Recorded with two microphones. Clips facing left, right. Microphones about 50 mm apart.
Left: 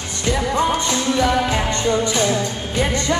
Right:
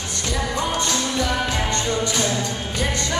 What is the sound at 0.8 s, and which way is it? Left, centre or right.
Music, left.